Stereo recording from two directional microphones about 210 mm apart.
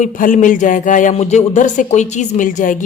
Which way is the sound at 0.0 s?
40° left (ahead or behind).